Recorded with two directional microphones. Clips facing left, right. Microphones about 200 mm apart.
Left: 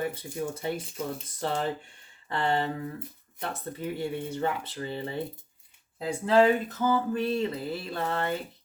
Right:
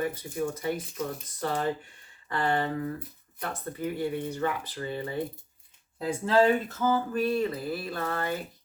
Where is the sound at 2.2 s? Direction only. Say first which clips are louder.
Even; 25° left (ahead or behind).